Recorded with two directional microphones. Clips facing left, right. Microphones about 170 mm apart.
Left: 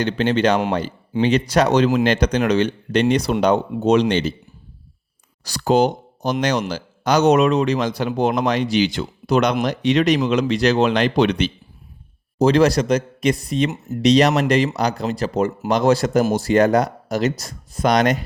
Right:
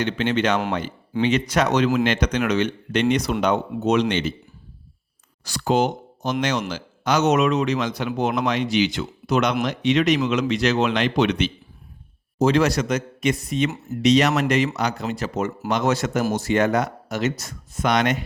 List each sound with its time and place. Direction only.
0.0 s speech: 35° left (ahead or behind)
5.5 s speech: 35° left (ahead or behind)